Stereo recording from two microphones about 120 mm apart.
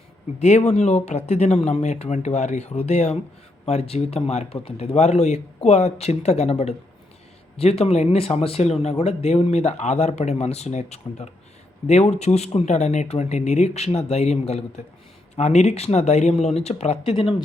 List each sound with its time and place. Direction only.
0.3 s speech: 70° left (ahead or behind); by 17.3 s 50° left (ahead or behind)